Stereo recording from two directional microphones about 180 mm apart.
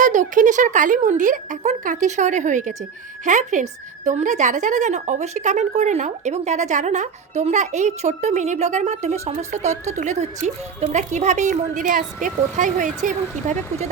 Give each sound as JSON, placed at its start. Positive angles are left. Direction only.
{"t": 0.0, "sound": "a woman's voice", "side_deg": -45}